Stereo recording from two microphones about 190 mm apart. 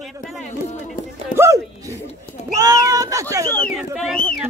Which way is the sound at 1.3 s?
15° right (ahead or behind).